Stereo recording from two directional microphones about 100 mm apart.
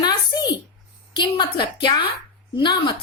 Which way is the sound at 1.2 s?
50° left (ahead or behind).